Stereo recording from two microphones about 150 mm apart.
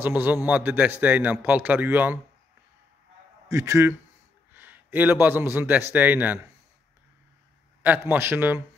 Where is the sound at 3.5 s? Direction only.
20° right (ahead or behind).